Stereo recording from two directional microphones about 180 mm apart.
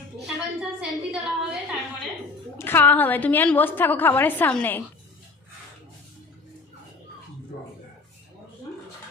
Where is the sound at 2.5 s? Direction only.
10° left (ahead or behind).